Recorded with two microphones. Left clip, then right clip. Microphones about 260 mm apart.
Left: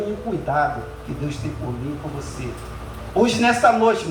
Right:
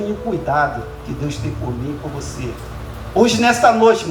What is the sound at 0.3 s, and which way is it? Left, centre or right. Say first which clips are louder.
Speech: right 7 dB; right.